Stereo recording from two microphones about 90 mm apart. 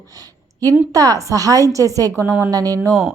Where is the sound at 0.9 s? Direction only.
40° right (ahead or behind).